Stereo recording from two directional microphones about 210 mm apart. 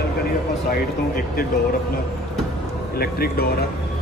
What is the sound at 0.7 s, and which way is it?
Speech, 45° left (ahead or behind).